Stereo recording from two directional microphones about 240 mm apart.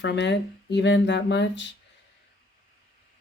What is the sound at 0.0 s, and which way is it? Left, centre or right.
Speech, left.